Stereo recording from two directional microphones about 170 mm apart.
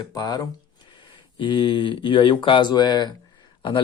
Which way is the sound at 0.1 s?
20° left (ahead or behind).